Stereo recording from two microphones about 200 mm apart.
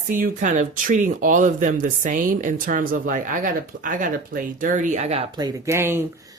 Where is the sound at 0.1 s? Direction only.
40° right (ahead or behind).